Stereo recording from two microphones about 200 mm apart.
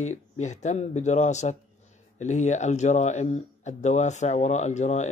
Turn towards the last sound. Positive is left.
turn(degrees=35)  # may be behind; listen again after turning